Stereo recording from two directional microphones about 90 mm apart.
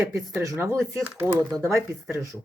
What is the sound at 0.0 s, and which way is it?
Speech, 35° right (ahead or behind).